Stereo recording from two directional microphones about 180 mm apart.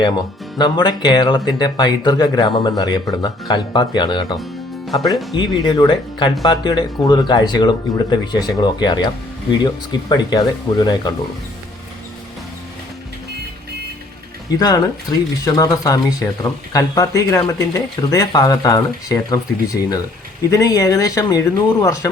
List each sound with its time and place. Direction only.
0.6 s speech: 25° left (ahead or behind)
14.5 s speech: 20° left (ahead or behind)